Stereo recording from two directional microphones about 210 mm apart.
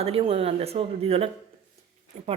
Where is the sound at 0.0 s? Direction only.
25° right (ahead or behind).